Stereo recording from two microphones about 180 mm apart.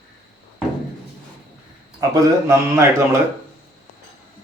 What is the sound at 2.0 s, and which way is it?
Speech, 15° right (ahead or behind).